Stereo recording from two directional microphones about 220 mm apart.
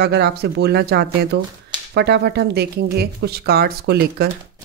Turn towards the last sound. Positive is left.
turn(degrees=-45)  # may be behind; listen again after turning